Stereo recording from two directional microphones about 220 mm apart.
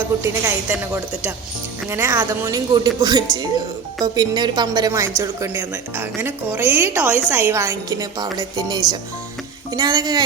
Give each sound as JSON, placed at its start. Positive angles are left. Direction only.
{"t": 0.2, "sound": "a woman's voice", "side_deg": -10}